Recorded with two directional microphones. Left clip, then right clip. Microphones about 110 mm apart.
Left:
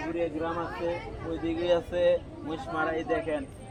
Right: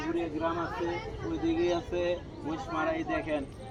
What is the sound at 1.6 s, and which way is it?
Speech, 50° left (ahead or behind).